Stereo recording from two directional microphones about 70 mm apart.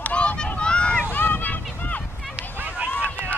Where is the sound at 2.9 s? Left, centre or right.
Left.